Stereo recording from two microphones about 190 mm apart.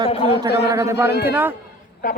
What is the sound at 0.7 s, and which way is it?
Speech, 15° right (ahead or behind).